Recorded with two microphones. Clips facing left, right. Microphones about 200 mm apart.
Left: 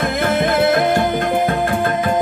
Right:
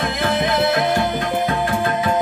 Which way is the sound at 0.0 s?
50° left (ahead or behind).